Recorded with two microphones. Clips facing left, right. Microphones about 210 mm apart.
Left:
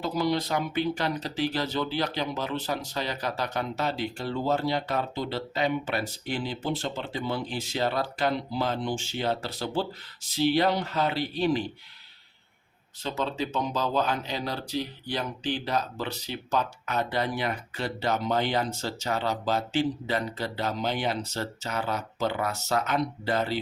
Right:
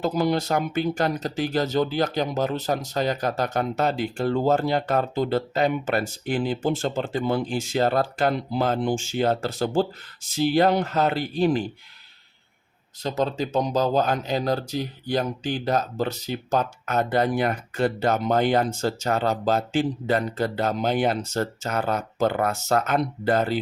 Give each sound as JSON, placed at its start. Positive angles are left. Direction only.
{"t": 0.0, "sound": "speech", "side_deg": -50}
{"t": 13.0, "sound": "speech", "side_deg": -40}